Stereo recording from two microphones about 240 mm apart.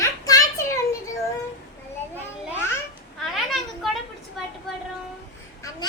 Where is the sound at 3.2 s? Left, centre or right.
Centre.